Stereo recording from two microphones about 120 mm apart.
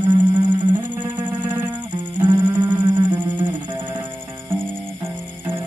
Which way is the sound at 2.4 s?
15° right (ahead or behind).